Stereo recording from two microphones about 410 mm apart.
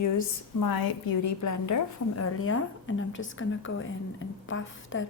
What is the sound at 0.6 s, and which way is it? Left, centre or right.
A woman's voice, left.